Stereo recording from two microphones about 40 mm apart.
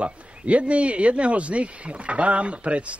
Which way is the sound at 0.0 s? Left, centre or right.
Right.